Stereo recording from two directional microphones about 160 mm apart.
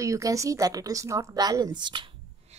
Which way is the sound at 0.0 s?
20° right (ahead or behind).